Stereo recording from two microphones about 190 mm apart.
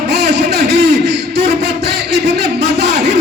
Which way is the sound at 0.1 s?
60° right (ahead or behind).